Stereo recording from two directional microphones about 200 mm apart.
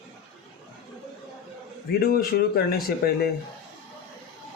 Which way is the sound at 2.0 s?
50° left (ahead or behind).